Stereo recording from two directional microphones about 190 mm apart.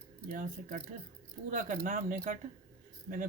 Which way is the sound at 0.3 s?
40° right (ahead or behind).